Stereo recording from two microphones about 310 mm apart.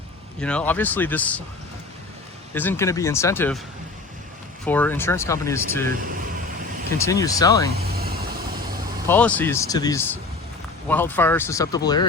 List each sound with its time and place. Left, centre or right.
0.3 s speech: centre
2.6 s speech: centre
4.6 s speech: centre
7.0 s speech: centre
7.8 s vehicle: right
9.0 s speech: centre